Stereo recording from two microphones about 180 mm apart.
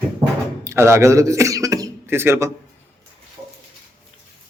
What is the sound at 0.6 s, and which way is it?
Speech, 15° right (ahead or behind).